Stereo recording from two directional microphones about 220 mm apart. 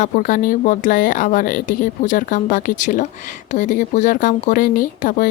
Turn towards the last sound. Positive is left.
turn(degrees=40)  # may be behind; listen again after turning